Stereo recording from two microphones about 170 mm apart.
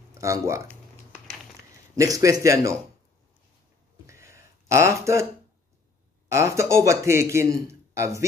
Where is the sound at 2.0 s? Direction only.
20° right (ahead or behind).